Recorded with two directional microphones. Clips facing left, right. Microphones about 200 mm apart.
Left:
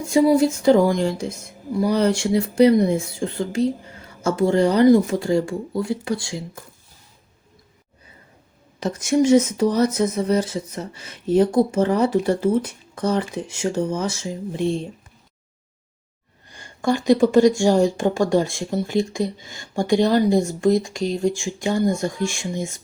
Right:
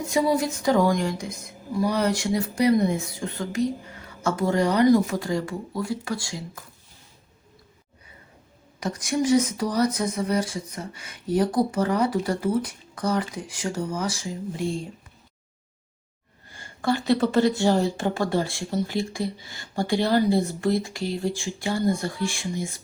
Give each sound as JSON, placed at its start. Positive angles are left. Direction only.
{"t": 0.1, "sound": "speech", "side_deg": 25}
{"t": 9.1, "sound": "speech", "side_deg": 25}
{"t": 16.5, "sound": "speech", "side_deg": 15}